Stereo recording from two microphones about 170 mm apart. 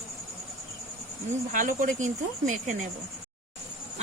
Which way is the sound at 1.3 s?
50° right (ahead or behind).